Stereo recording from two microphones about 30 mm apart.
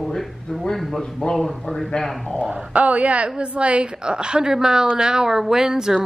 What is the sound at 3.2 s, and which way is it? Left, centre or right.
A woman's voice, right.